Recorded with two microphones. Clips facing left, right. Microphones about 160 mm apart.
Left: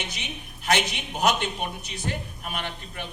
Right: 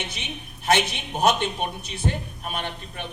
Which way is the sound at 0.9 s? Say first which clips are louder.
Right 2 dB; 30° right (ahead or behind).